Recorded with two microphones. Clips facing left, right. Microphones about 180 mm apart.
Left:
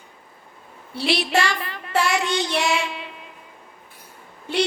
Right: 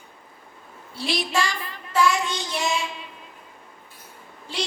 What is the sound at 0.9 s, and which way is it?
Child singing, 70° left (ahead or behind).